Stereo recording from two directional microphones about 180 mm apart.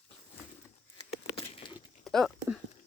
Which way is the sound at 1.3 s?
30° left (ahead or behind).